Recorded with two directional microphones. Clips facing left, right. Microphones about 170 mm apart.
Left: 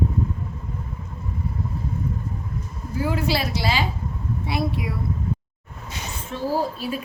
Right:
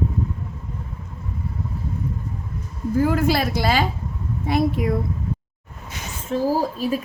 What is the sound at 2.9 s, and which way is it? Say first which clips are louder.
Speech: right 5 dB; 50° right (ahead or behind).